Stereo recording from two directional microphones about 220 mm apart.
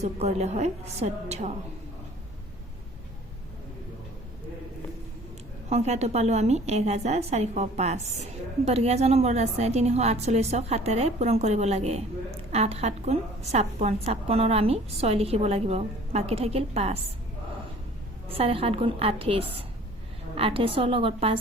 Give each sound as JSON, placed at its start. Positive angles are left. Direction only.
{"t": 0.0, "sound": "a woman's voice", "side_deg": -30}
{"t": 5.6, "sound": "a woman's voice", "side_deg": -30}
{"t": 18.3, "sound": "a woman's voice", "side_deg": -25}